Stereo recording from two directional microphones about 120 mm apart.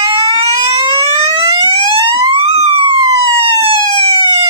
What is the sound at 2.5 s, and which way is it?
Police car, 55° right (ahead or behind).